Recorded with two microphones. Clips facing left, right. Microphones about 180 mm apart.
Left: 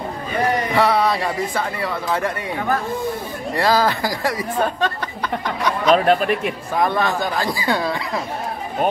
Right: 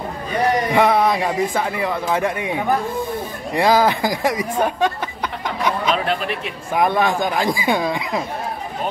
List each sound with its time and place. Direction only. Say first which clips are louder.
0.7 s a man's voice: right 1 dB; 15° right (ahead or behind)
5.9 s speech: left 6 dB; 45° left (ahead or behind)
6.7 s a man's voice: right 3 dB; 15° right (ahead or behind)